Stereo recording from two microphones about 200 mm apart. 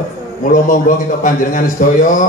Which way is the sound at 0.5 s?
40° left (ahead or behind).